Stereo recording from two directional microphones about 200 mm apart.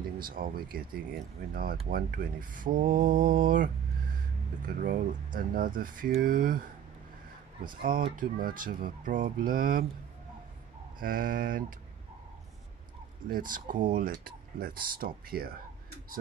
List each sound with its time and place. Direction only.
0.2 s speech: 45° right (ahead or behind)
8.2 s speech: 45° right (ahead or behind)
11.0 s speech: 45° right (ahead or behind)
13.3 s speech: 45° right (ahead or behind)